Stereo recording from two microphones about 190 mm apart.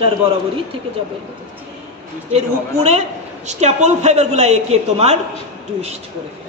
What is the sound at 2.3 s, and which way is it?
Speech, 35° right (ahead or behind).